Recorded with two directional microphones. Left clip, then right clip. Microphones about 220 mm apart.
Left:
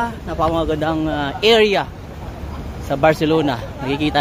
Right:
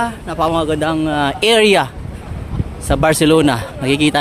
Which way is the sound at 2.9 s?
45° right (ahead or behind).